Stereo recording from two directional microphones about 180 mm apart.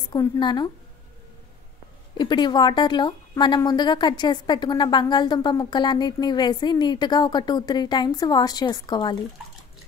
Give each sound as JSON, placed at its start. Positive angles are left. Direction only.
{"t": 0.1, "sound": "a woman's voice", "side_deg": 25}
{"t": 2.1, "sound": "a woman's voice", "side_deg": 25}